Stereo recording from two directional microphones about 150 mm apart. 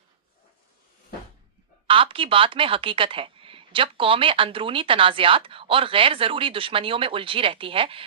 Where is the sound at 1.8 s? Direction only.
35° right (ahead or behind).